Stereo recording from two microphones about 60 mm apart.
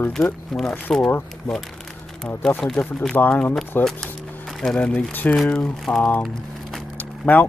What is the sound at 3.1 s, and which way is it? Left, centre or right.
Speech, left.